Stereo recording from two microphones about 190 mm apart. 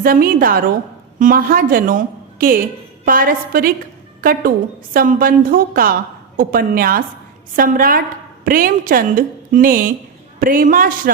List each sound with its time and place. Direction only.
0.0 s a woman's voice: 50° right (ahead or behind)